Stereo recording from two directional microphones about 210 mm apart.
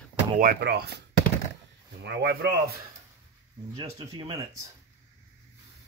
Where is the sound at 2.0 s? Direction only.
55° right (ahead or behind).